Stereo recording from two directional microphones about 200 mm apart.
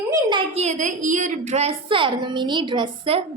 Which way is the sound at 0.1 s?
20° right (ahead or behind).